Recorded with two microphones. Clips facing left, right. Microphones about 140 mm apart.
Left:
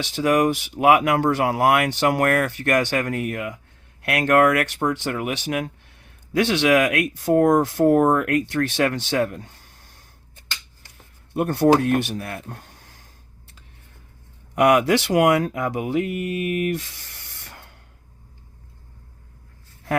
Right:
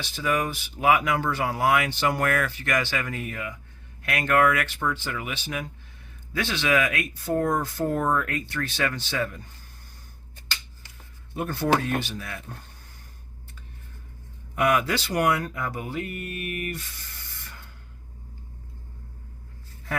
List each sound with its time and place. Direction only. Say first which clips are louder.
0.0 s speech: left 8 dB; 75° left (ahead or behind)
7.9 s speech: left 8 dB; 55° left (ahead or behind); by 10.0 s 85° left
11.3 s speech: left 7 dB; 65° left (ahead or behind)
12.6 s a sound: left 3 dB; 90° left
14.5 s speech: left 7 dB; 70° left (ahead or behind)